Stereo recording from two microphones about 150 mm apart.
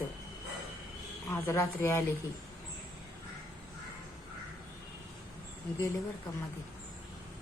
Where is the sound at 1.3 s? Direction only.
15° left (ahead or behind).